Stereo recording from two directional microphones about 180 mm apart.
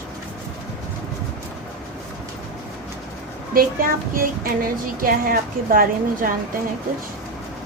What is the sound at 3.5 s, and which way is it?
Speech, 50° right (ahead or behind).